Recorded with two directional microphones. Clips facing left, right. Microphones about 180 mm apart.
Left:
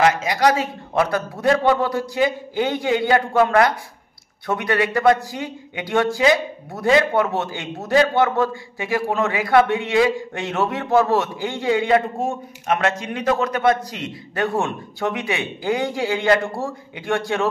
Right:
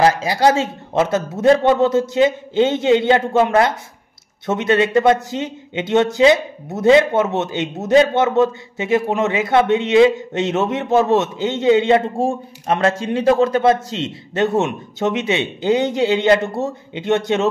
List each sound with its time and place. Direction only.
0.0 s speech: 30° right (ahead or behind)